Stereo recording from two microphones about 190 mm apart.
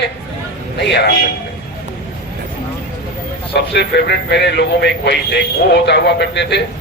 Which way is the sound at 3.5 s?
60° left (ahead or behind).